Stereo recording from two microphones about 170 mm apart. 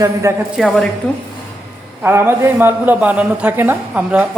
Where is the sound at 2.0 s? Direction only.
10° right (ahead or behind).